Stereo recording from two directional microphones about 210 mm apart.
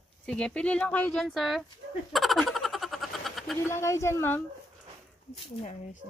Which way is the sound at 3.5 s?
15° left (ahead or behind).